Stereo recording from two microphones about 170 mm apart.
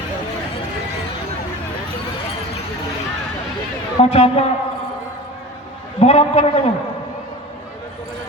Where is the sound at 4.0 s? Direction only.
35° left (ahead or behind).